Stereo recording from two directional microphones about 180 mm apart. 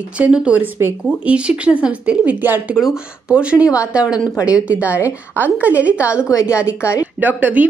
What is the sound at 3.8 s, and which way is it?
Speech, 5° right (ahead or behind).